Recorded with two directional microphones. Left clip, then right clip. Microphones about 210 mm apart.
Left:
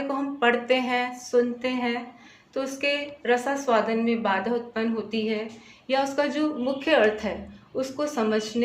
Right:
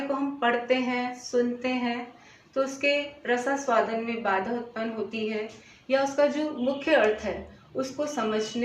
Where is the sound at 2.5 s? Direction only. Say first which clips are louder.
Right 1 dB; 45° left (ahead or behind).